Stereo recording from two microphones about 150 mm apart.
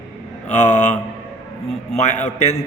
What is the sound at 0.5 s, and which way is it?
A man's voice, 50° left (ahead or behind).